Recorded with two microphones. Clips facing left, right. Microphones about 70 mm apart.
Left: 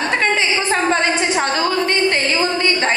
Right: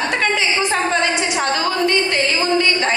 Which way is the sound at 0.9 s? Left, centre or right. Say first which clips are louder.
Left 1 dB; left.